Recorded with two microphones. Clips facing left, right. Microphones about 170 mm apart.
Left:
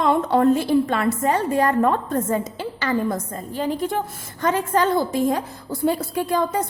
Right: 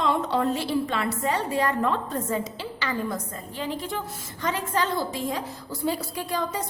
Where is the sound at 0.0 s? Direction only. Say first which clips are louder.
Left 6 dB; 50° left (ahead or behind).